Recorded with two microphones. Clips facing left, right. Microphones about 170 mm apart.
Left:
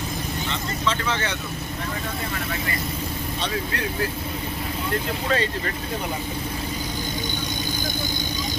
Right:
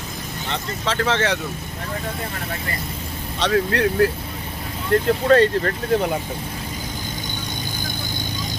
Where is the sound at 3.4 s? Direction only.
65° right (ahead or behind).